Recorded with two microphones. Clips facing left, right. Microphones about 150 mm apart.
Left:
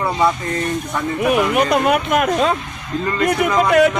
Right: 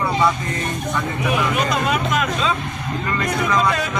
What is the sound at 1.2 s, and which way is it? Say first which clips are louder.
Speech: left 6 dB; 60° left (ahead or behind).